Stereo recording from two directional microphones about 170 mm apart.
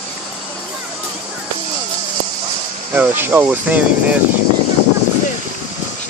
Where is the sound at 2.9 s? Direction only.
10° right (ahead or behind).